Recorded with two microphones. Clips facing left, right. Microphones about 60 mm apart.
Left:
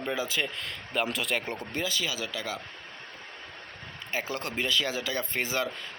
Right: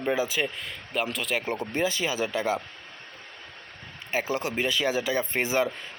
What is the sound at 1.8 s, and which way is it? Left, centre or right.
Speech, right.